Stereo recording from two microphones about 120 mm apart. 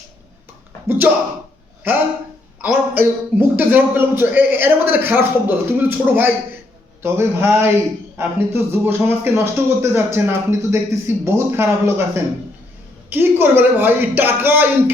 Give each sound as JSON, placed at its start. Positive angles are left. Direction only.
{"t": 0.9, "sound": "a man's voice", "side_deg": -15}
{"t": 2.6, "sound": "a man's voice", "side_deg": -15}